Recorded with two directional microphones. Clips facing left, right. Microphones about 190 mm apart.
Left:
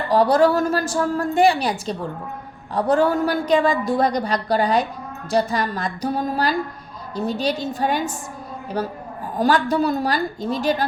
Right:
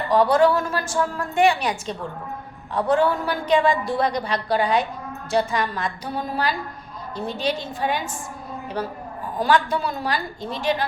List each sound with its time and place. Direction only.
0.1 s a woman's voice: 35° left (ahead or behind)